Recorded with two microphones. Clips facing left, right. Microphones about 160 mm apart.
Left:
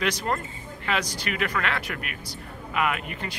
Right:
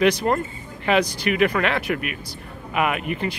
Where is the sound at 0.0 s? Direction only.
20° right (ahead or behind).